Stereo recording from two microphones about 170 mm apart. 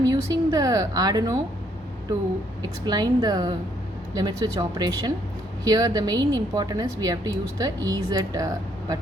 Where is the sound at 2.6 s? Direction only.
25° right (ahead or behind).